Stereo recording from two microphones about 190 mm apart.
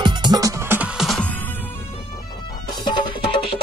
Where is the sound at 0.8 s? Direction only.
Centre (ahead or behind).